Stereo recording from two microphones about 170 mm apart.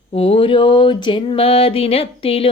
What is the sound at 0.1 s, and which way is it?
Speech, 35° left (ahead or behind).